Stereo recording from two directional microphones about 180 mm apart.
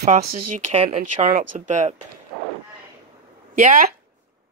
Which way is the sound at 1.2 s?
45° right (ahead or behind).